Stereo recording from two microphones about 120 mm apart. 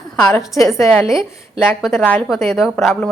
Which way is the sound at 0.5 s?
25° left (ahead or behind).